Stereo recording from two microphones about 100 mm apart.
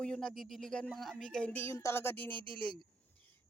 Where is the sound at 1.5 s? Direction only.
25° left (ahead or behind).